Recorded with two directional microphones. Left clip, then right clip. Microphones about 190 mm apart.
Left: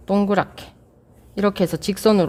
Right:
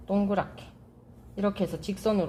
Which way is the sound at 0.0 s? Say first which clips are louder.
Left 9 dB; 65° left (ahead or behind).